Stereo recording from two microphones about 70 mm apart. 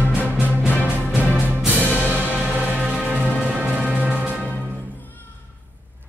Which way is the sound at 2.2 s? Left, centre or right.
Left.